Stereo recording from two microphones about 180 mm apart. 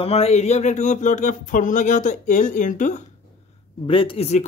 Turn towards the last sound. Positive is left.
turn(degrees=35)  # may be behind; listen again after turning